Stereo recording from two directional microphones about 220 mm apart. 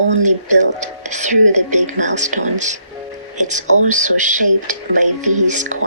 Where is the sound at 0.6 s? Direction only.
35° right (ahead or behind).